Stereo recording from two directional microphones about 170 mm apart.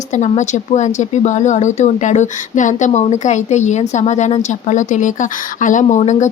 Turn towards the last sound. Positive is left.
turn(degrees=45)  # may be behind; listen again after turning